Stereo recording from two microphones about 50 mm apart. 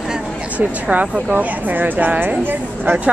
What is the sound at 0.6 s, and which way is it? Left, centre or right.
Speech, right.